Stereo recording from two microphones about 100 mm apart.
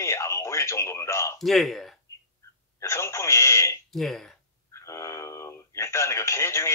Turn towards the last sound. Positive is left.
turn(degrees=30)  # may be behind; listen again after turning